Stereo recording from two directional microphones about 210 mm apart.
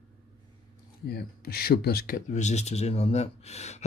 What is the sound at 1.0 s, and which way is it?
Speech, 50° left (ahead or behind).